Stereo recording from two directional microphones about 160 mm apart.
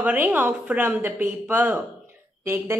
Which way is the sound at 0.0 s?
10° right (ahead or behind).